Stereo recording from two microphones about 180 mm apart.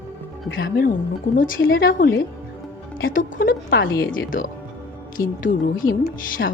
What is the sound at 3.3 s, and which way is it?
Speech, 55° left (ahead or behind).